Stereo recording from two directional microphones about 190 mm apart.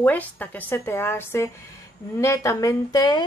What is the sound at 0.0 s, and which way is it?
A woman's voice, 10° left (ahead or behind).